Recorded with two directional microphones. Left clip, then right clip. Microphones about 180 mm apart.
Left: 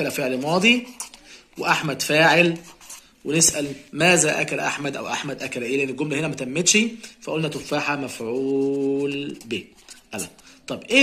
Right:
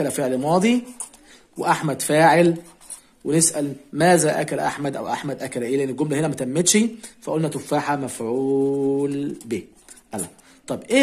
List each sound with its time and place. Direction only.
0.0 s a man's voice: 65° right (ahead or behind)
1.8 s a man's voice: 70° right (ahead or behind)